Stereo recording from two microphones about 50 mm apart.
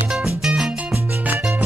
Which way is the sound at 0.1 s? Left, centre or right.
Centre.